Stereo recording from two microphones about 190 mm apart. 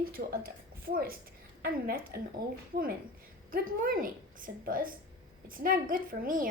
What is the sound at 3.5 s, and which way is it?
A woman's voice, 50° right (ahead or behind).